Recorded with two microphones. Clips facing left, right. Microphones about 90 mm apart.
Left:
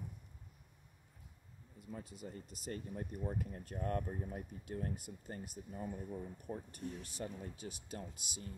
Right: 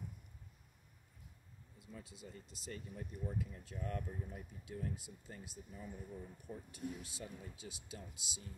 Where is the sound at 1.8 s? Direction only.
45° left (ahead or behind).